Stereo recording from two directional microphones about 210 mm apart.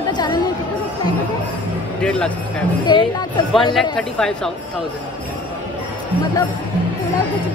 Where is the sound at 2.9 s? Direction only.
20° left (ahead or behind).